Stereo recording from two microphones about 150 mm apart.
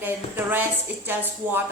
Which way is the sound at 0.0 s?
15° right (ahead or behind).